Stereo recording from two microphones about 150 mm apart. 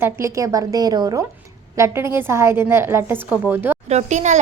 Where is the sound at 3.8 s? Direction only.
50° right (ahead or behind).